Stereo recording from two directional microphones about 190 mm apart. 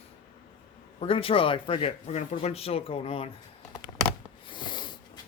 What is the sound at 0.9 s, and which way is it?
Speech, 30° left (ahead or behind).